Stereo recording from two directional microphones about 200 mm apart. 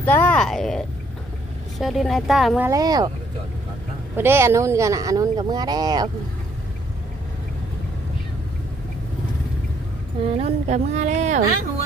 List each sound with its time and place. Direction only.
0.0 s speech: 10° left (ahead or behind)
2.6 s speech: 20° right (ahead or behind)
4.2 s speech: 10° right (ahead or behind)
10.3 s a woman's voice: 35° right (ahead or behind)